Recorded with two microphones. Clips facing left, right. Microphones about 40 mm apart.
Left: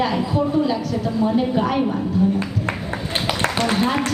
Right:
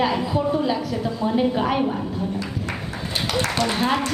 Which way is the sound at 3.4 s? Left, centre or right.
Left.